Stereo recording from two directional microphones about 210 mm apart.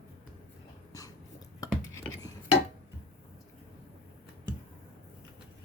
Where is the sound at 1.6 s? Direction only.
15° left (ahead or behind).